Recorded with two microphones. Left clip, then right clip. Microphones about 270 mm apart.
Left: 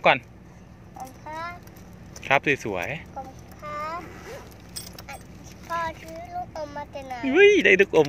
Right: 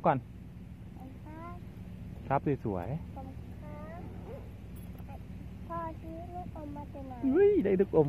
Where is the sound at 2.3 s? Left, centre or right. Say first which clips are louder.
Left 10 dB; centre.